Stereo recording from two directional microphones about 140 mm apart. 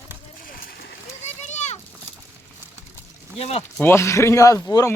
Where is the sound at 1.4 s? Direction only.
55° left (ahead or behind).